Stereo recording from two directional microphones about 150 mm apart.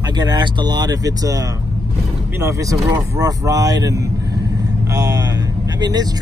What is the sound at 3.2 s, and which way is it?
Speech, 25° right (ahead or behind).